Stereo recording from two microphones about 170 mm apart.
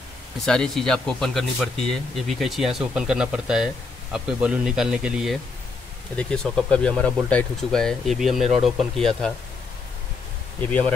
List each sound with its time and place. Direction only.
0.5 s speech: 5° left (ahead or behind)
10.6 s speech: 10° left (ahead or behind)